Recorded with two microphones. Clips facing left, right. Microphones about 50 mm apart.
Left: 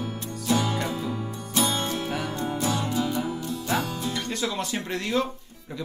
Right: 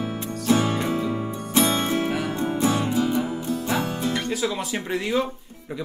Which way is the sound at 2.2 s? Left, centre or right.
Right.